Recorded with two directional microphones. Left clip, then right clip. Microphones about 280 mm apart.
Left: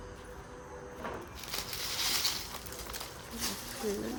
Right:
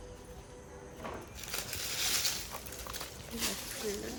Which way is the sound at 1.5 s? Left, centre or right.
Left.